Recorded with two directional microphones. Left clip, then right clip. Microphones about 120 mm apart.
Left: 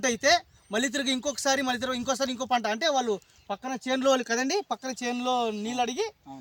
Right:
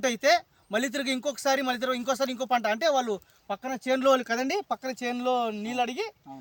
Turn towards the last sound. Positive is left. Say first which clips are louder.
# left 1 dB
turn(degrees=-10)  # may be behind; listen again after turning